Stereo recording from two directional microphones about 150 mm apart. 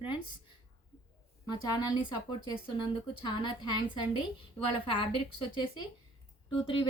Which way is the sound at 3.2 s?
30° left (ahead or behind).